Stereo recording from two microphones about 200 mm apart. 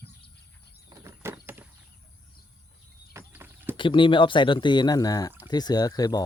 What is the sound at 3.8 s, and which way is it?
Speech, 25° left (ahead or behind).